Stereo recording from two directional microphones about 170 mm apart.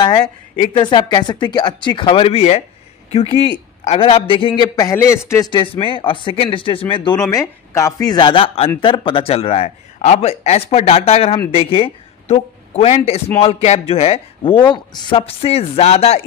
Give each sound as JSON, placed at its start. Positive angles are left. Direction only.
{"t": 0.7, "sound": "a man's voice", "side_deg": 25}
{"t": 7.2, "sound": "a man's voice", "side_deg": 20}